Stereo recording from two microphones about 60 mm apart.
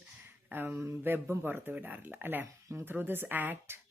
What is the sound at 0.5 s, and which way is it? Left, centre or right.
A woman's voice, right.